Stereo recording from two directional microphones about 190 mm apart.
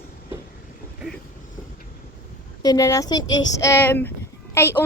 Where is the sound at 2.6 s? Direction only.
20° left (ahead or behind).